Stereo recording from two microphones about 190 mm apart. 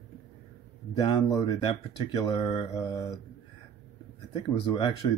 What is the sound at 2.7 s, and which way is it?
Speech, 15° left (ahead or behind).